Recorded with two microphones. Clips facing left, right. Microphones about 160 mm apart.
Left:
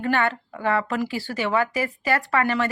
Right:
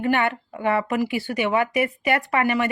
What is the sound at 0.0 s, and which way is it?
A woman's voice, 15° right (ahead or behind).